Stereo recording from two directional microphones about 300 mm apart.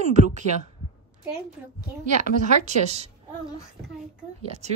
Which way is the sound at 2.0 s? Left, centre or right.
Right.